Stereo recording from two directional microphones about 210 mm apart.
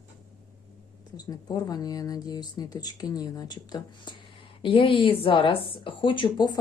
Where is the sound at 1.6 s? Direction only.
20° left (ahead or behind).